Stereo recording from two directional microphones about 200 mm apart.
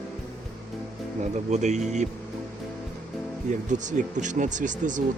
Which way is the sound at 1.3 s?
35° right (ahead or behind).